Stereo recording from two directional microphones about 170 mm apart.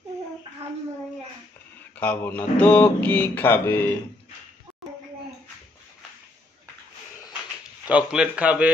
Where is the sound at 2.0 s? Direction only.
10° left (ahead or behind).